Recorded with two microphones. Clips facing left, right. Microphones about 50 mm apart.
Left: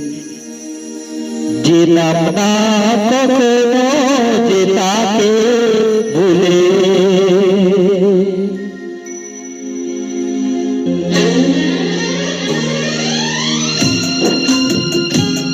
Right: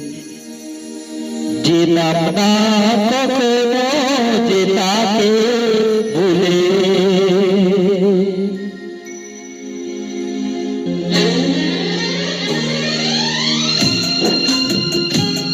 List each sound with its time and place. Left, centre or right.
1.3 s music: left
10.3 s music: left